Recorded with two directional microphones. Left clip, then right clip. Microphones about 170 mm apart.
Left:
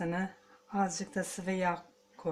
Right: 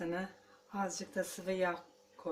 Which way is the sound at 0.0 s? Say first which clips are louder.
Left 3 dB; 40° left (ahead or behind).